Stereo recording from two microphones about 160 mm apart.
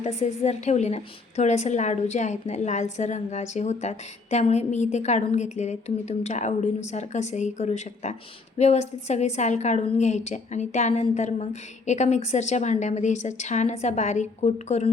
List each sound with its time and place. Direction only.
0.0 s a woman's voice: 45° left (ahead or behind)